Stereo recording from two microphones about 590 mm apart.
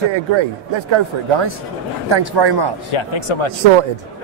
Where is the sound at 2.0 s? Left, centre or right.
Right.